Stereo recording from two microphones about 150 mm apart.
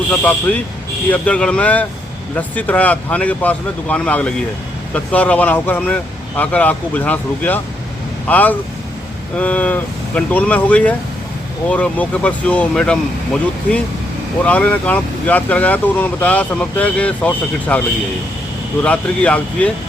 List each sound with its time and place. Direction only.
0.1 s speech: 10° left (ahead or behind)